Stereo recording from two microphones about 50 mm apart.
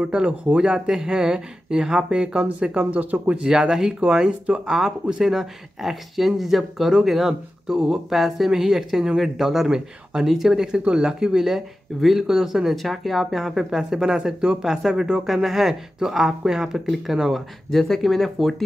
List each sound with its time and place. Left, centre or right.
0.1 s speech: right
2.9 s speech: right
3.4 s speech: centre
17.6 s speech: centre